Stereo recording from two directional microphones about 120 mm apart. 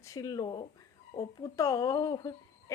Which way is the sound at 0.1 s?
30° left (ahead or behind).